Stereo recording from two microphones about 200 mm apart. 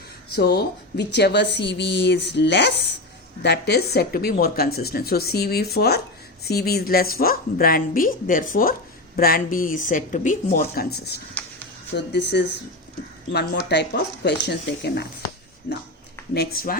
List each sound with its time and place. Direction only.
0.3 s speech: 55° left (ahead or behind)